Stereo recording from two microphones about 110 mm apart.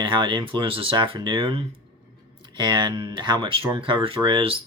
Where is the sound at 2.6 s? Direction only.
45° right (ahead or behind).